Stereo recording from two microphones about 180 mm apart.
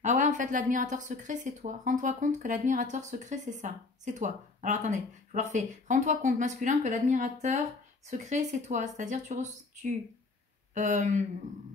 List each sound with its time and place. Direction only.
0.0 s speech: 45° right (ahead or behind)